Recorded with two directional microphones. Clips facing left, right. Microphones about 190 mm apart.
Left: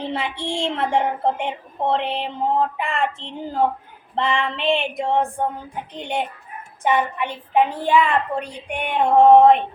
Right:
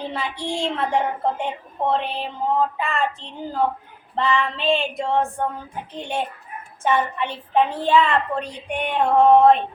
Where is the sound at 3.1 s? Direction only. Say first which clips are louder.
Left 2 dB; 25° left (ahead or behind).